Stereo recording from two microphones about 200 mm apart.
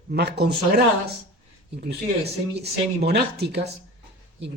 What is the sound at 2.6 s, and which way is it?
Speech, 55° right (ahead or behind).